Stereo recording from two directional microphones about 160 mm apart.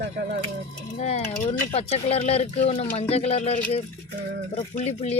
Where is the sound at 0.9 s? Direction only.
40° left (ahead or behind).